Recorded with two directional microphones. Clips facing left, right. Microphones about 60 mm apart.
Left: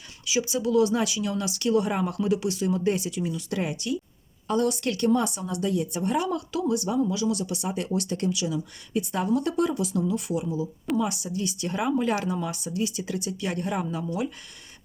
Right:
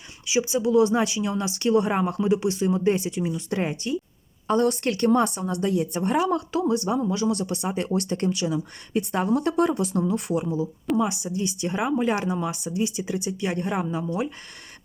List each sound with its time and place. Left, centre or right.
0.3 s a woman's voice: right
10.9 s speech: right